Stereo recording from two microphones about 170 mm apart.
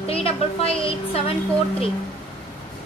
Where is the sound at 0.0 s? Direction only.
35° left (ahead or behind).